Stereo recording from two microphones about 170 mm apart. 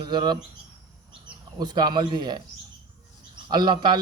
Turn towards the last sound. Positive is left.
turn(degrees=-25)  # may be behind; listen again after turning